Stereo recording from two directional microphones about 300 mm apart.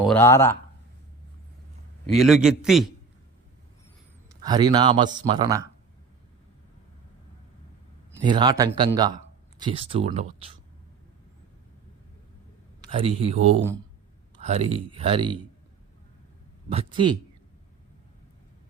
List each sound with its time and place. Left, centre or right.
0.0 s speech: centre
2.0 s a man's voice: centre
4.4 s a man's voice: centre
8.2 s speech: centre
12.9 s speech: centre
16.7 s a man's voice: centre